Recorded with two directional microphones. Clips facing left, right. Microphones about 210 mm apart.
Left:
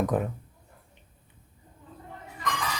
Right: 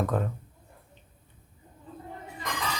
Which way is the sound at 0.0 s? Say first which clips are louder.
Left 2 dB; 15° left (ahead or behind).